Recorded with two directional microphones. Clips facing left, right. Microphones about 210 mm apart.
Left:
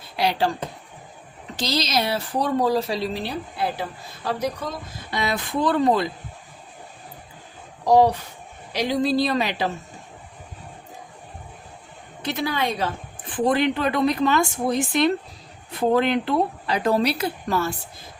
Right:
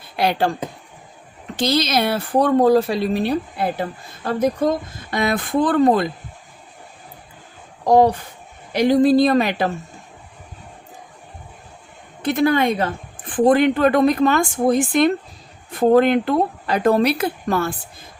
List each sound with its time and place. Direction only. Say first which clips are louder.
0.2 s a woman's voice: right 3 dB; 55° right (ahead or behind)
1.5 s a woman's voice: right 5 dB; 55° right (ahead or behind)
7.9 s a woman's voice: right 3 dB; 55° right (ahead or behind)
12.2 s a woman's voice: right 8 dB; 50° right (ahead or behind)